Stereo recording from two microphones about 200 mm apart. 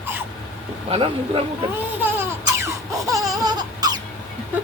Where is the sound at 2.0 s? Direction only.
10° right (ahead or behind).